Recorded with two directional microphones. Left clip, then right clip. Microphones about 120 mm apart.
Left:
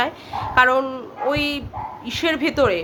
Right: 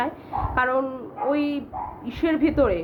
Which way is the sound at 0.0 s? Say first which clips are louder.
Left 3 dB; 20° left (ahead or behind).